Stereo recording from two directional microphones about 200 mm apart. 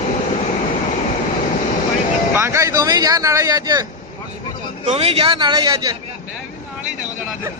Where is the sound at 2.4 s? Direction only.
15° right (ahead or behind).